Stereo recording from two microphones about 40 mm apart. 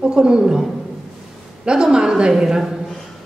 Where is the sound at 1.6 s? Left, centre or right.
Centre.